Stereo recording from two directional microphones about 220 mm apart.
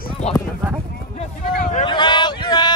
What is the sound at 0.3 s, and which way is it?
Speech, 25° left (ahead or behind).